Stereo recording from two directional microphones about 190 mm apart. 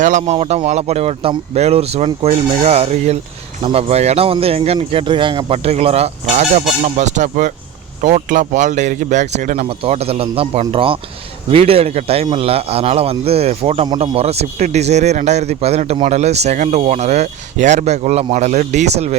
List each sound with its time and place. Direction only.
0.0 s a man's voice: 40° right (ahead or behind)
9.6 s a man's voice: 30° right (ahead or behind)
13.8 s a man's voice: 20° right (ahead or behind); by 18.9 s 40° right (ahead or behind)